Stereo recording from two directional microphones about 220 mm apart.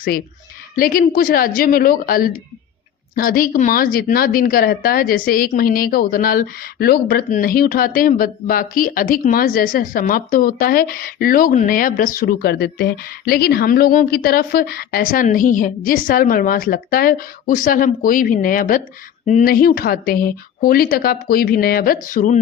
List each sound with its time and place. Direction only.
0.8 s a woman's voice: 40° left (ahead or behind)